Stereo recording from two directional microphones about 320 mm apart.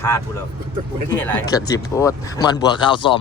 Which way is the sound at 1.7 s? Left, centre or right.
Centre.